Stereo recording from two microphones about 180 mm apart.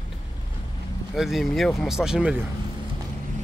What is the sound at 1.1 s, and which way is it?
Speech, centre (ahead or behind).